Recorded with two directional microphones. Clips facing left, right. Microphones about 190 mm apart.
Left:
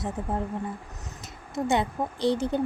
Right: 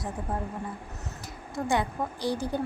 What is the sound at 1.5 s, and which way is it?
Speech, 20° left (ahead or behind).